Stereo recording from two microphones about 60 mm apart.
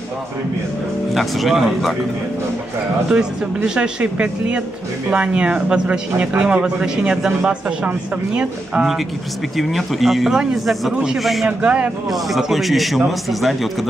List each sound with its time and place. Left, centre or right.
1.1 s a man's voice: centre
3.1 s a man's voice: centre
9.6 s a man's voice: centre
10.9 s speech: centre
11.1 s a man's voice: centre
11.4 s a man's voice: centre
12.1 s a man's voice: centre